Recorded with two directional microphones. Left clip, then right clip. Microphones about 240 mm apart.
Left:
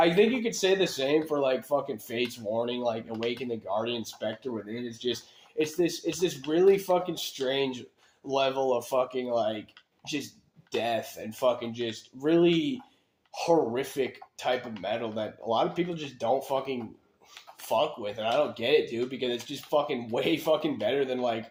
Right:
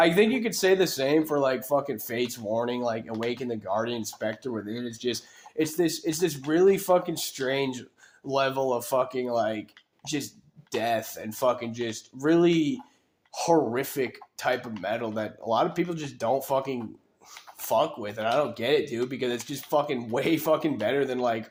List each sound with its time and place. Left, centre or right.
0.0 s speech: right
10.7 s speech: right